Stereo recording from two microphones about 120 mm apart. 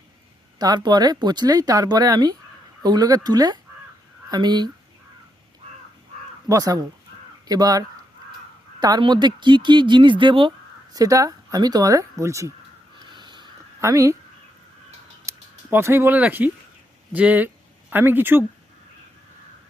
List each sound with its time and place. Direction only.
0.6 s speech: 35° right (ahead or behind)
6.5 s speech: 30° right (ahead or behind)
10.9 s speech: 30° right (ahead or behind)
13.1 s crow: 40° right (ahead or behind)
13.8 s speech: 25° right (ahead or behind)
15.3 s speech: 20° right (ahead or behind)